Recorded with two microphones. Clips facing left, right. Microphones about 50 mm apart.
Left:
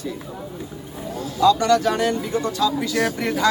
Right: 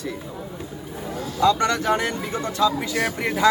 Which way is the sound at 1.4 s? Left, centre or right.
Right.